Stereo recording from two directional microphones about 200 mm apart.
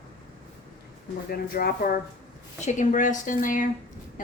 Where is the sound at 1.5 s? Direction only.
45° left (ahead or behind).